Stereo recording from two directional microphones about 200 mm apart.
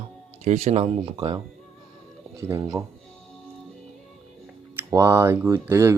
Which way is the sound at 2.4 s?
15° right (ahead or behind).